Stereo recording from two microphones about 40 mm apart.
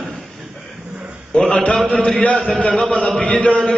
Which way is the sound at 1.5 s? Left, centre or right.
Left.